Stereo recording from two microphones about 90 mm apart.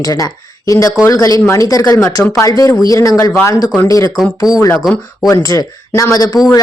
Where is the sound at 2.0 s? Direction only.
30° left (ahead or behind).